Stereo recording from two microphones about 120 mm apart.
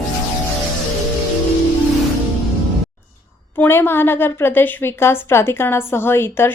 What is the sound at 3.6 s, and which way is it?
A woman's voice, 20° left (ahead or behind).